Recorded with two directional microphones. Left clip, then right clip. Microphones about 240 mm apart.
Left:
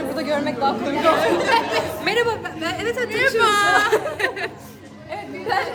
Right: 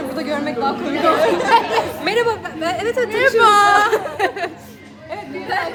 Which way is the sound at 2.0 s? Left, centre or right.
Centre.